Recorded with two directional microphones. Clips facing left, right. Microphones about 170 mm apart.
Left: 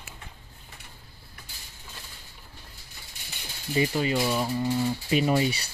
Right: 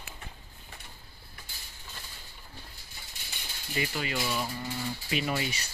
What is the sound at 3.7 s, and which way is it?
Speech, 35° left (ahead or behind).